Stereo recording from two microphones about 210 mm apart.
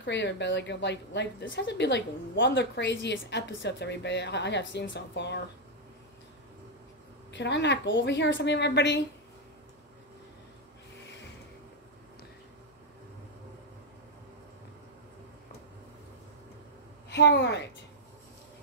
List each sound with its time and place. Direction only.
0.0 s a woman's voice: 55° left (ahead or behind)
7.3 s a woman's voice: 55° left (ahead or behind)
17.1 s a woman's voice: 55° left (ahead or behind)